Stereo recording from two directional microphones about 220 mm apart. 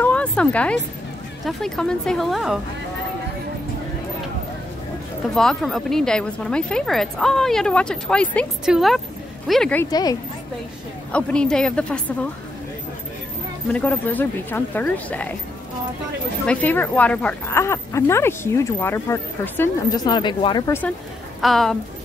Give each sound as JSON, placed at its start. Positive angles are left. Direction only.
{"t": 0.0, "sound": "a sound", "side_deg": 5}
{"t": 1.4, "sound": "a woman's voice", "side_deg": 0}
{"t": 5.3, "sound": "a woman's voice", "side_deg": 0}
{"t": 9.8, "sound": "speech", "side_deg": 15}
{"t": 11.1, "sound": "a woman's voice", "side_deg": 5}
{"t": 13.7, "sound": "speech", "side_deg": 5}
{"t": 16.4, "sound": "speech", "side_deg": 5}
{"t": 21.4, "sound": "a woman's voice", "side_deg": 0}